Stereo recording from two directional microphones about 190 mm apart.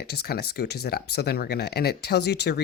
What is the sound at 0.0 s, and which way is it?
Speech, 55° left (ahead or behind).